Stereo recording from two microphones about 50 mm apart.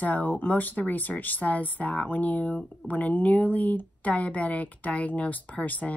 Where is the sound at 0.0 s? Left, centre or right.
Left.